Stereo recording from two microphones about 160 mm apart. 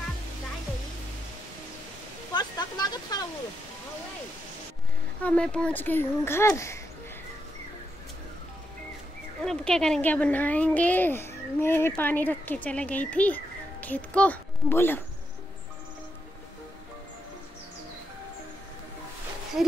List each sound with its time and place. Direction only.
2.3 s a sound: 25° left (ahead or behind)
5.2 s speech: 5° left (ahead or behind)
9.4 s speech: 5° left (ahead or behind)
19.6 s speech: 5° right (ahead or behind)